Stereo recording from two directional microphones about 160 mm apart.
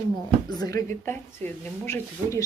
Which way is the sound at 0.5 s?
25° left (ahead or behind).